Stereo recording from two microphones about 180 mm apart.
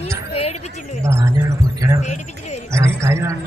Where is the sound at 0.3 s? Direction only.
35° left (ahead or behind).